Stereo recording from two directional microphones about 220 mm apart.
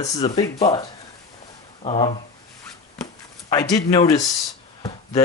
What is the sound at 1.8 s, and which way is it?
Speech, 25° left (ahead or behind).